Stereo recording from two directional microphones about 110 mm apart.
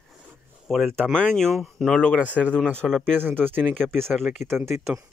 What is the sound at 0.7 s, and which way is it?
Speech, centre (ahead or behind).